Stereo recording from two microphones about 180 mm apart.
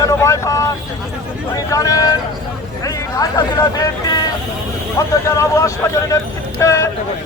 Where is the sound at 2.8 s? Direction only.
20° left (ahead or behind).